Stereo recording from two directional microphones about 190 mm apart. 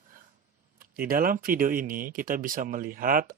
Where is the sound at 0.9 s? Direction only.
50° right (ahead or behind).